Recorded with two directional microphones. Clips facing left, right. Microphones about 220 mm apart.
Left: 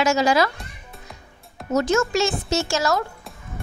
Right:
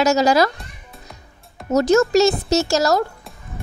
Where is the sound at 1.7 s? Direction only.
40° right (ahead or behind).